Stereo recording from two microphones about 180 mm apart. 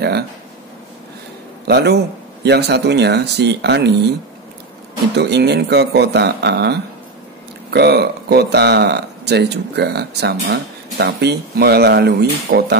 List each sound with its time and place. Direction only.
1.7 s speech: 65° right (ahead or behind)
5.1 s speech: 70° right (ahead or behind)